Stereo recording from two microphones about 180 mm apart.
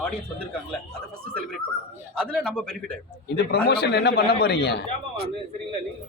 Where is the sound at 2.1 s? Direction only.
5° left (ahead or behind).